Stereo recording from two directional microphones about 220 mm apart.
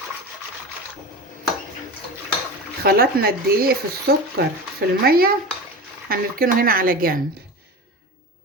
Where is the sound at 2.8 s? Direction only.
45° right (ahead or behind).